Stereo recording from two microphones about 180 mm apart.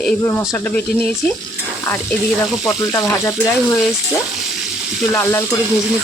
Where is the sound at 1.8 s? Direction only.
10° left (ahead or behind).